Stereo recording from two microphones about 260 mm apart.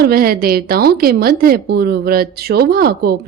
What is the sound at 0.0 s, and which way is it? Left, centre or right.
Speech, right.